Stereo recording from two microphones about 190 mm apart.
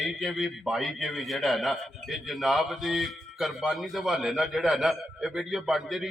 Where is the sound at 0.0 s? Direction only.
Centre (ahead or behind).